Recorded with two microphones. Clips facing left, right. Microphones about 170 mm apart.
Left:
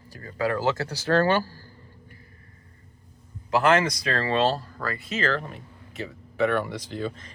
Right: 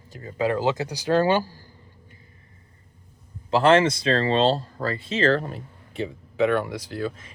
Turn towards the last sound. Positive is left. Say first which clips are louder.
# right 2 dB
turn(degrees=-5)  # may be behind; listen again after turning